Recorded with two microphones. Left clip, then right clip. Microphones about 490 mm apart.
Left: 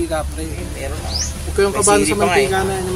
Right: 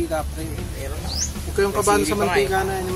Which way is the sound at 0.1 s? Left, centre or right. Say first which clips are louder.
Left 3 dB; right.